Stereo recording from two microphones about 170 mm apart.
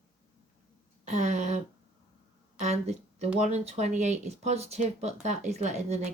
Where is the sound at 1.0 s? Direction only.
40° right (ahead or behind).